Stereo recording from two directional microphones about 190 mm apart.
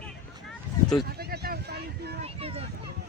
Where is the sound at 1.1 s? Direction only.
55° right (ahead or behind).